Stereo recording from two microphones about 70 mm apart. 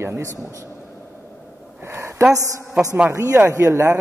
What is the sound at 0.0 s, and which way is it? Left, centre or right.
Speech, right.